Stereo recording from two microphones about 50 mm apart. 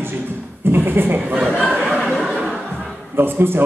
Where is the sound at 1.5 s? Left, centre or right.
Centre.